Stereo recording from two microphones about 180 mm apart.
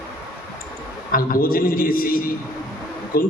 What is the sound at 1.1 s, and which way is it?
A man's voice, 50° left (ahead or behind).